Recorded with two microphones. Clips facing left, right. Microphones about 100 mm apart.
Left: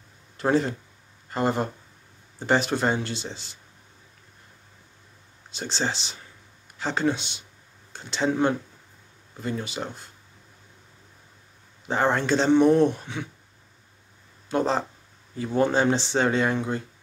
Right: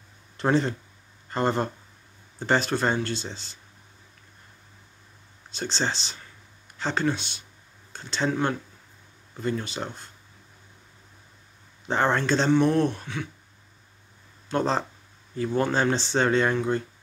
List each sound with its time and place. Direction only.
0.4 s speech: 5° left (ahead or behind)
5.5 s speech: 15° left (ahead or behind)
11.9 s speech: 10° left (ahead or behind)
14.5 s speech: 10° left (ahead or behind)